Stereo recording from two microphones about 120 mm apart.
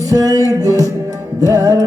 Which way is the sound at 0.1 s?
30° right (ahead or behind).